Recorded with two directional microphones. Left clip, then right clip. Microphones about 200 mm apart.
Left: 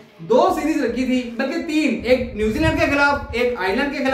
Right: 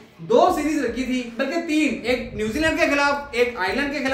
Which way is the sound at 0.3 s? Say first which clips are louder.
Left 1 dB; 15° right (ahead or behind).